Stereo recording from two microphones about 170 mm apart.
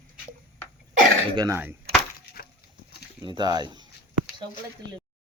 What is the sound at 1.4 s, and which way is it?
Speech, 15° right (ahead or behind).